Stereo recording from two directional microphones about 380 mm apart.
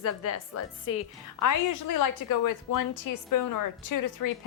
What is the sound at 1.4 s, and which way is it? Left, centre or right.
A woman's voice, left.